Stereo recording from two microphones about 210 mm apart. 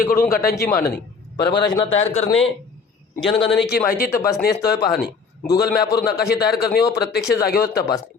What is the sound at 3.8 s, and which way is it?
A man's voice, 45° left (ahead or behind).